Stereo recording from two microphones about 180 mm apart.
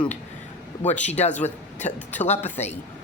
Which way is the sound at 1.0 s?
40° left (ahead or behind).